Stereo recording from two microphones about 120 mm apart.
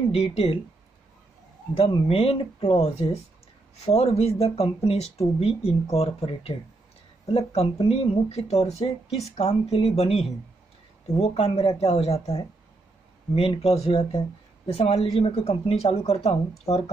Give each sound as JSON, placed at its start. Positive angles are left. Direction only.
{"t": 0.1, "sound": "speech", "side_deg": 55}
{"t": 1.8, "sound": "speech", "side_deg": 55}
{"t": 14.7, "sound": "speech", "side_deg": 60}